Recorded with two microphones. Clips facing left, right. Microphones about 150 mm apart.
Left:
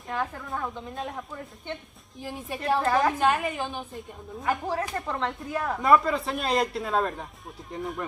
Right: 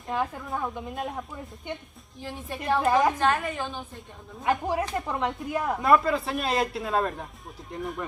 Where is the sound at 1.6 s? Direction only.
15° right (ahead or behind).